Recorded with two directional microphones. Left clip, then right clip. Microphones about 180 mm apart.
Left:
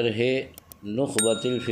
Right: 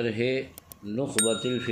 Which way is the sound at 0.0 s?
30° left (ahead or behind).